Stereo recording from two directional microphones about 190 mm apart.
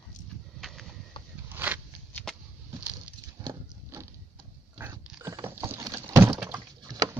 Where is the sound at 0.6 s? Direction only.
Centre (ahead or behind).